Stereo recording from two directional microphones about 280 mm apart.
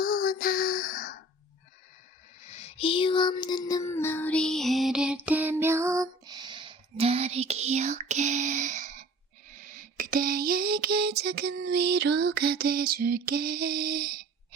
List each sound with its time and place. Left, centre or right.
0.0 s child singing: left
2.5 s music: left; by 9.0 s right
9.5 s a sound: right